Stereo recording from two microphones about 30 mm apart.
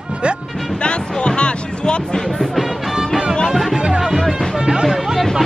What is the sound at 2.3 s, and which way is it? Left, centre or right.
Music, centre.